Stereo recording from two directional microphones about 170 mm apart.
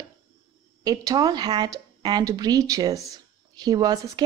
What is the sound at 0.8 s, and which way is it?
Speech, 20° right (ahead or behind).